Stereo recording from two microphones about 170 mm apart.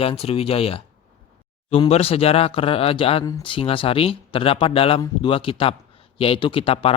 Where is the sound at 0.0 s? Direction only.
35° left (ahead or behind).